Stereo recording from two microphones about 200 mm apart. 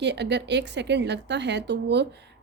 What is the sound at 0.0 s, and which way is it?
Speech, 60° right (ahead or behind).